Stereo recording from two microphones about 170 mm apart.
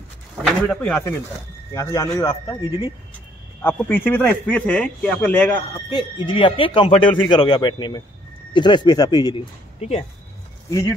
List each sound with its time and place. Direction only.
0.4 s speech: 5° left (ahead or behind)
3.6 s speech: 10° left (ahead or behind)
5.9 s speech: 25° left (ahead or behind)
9.8 s speech: 40° left (ahead or behind)
10.7 s speech: 15° left (ahead or behind)